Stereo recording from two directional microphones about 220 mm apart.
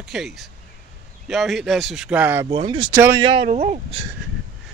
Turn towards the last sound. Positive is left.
turn(degrees=-30)  # may be behind; listen again after turning